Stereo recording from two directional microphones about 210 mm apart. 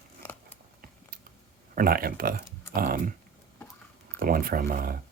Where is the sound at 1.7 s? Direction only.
45° right (ahead or behind).